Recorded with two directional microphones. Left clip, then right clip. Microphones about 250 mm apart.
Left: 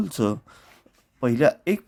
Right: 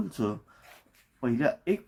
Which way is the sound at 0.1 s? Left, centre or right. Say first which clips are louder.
Left 7 dB; left.